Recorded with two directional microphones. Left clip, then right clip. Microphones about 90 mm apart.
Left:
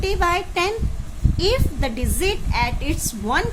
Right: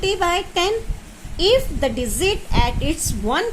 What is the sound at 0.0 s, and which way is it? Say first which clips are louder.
A woman's voice: right 1 dB; 40° right (ahead or behind).